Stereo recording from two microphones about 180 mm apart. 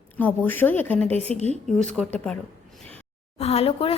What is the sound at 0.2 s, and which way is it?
Speech, 10° left (ahead or behind).